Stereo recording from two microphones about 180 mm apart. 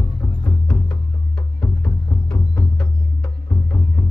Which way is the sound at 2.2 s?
20° left (ahead or behind).